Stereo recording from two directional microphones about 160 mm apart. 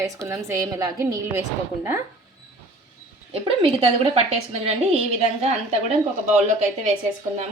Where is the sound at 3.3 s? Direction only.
40° right (ahead or behind).